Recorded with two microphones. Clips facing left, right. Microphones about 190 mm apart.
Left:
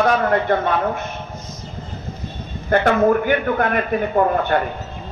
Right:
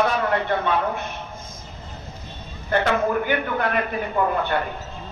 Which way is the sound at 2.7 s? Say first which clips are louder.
Left 6 dB; 50° left (ahead or behind).